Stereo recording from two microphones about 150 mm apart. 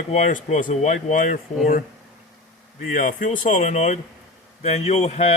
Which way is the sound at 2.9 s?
60° left (ahead or behind).